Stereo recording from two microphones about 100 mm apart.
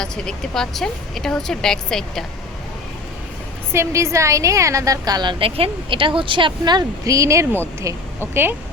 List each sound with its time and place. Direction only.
0.0 s a woman's voice: 5° left (ahead or behind)
3.7 s a woman's voice: 30° right (ahead or behind)